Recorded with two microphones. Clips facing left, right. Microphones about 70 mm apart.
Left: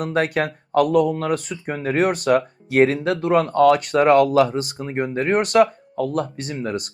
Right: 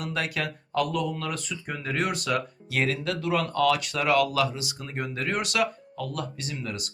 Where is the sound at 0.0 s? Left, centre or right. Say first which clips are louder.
Left 9 dB; left.